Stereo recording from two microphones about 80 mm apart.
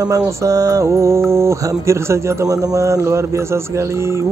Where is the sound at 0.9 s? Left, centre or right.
Right.